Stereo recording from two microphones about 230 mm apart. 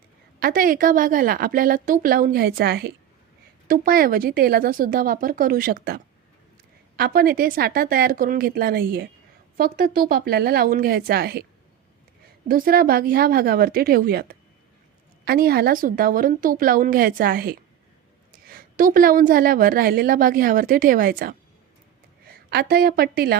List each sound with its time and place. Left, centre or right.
0.3 s a woman's voice: right
12.5 s a woman's voice: right
22.3 s a sound: right
22.7 s a woman's voice: right